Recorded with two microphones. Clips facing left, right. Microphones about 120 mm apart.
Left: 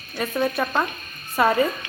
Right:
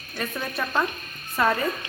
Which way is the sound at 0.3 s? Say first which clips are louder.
Left 9 dB; 25° left (ahead or behind).